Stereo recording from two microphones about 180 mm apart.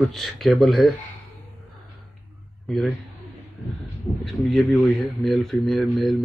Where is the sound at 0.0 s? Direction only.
Centre (ahead or behind).